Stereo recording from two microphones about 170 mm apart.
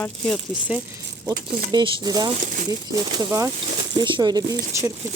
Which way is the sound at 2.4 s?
50° right (ahead or behind).